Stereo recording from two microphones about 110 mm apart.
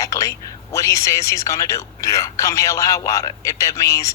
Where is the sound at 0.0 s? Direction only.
30° left (ahead or behind).